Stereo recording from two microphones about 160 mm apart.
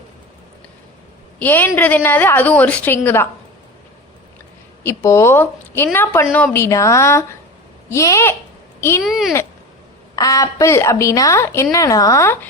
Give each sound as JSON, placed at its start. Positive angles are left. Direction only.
{"t": 1.4, "sound": "a woman's voice", "side_deg": 10}
{"t": 4.8, "sound": "a woman's voice", "side_deg": 15}
{"t": 9.0, "sound": "speech", "side_deg": 0}
{"t": 10.2, "sound": "a woman's voice", "side_deg": 20}